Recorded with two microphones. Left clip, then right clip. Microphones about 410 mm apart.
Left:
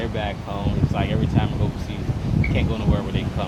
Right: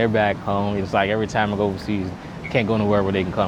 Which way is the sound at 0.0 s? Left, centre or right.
Right.